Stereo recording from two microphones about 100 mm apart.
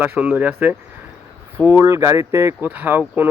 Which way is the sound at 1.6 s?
25° right (ahead or behind).